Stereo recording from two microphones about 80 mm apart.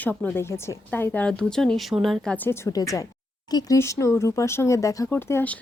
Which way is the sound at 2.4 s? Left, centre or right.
Left.